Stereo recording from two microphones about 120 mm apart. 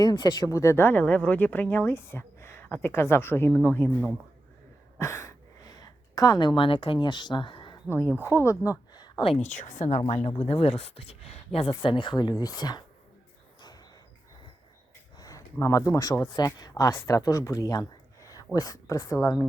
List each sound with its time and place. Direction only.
0.0 s speech: 35° left (ahead or behind); by 4.1 s 15° left (ahead or behind)
4.9 s a sound: 25° left (ahead or behind); by 7.8 s 40° left (ahead or behind)
8.2 s speech: 20° left (ahead or behind)
9.2 s speech: 55° left (ahead or behind)
9.5 s speech: 90° left
10.2 s speech: 55° left (ahead or behind)
11.8 s speech: 45° left (ahead or behind)
13.6 s a sound: 35° left (ahead or behind)
15.2 s a woman's voice: 25° left (ahead or behind)